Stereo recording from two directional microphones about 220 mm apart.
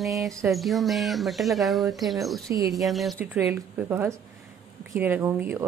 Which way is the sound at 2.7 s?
Centre (ahead or behind).